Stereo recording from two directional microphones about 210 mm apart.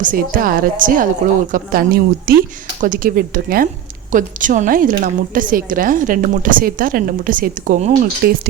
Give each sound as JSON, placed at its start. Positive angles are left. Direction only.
{"t": 0.0, "sound": "a woman's voice", "side_deg": -40}
{"t": 8.2, "sound": "a woman's voice", "side_deg": -50}